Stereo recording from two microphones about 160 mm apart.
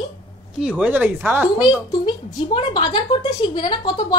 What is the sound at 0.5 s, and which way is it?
Speech, 5° right (ahead or behind).